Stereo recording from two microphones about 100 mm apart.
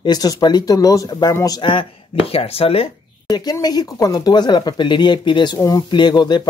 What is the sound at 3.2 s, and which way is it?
Speech, 40° left (ahead or behind).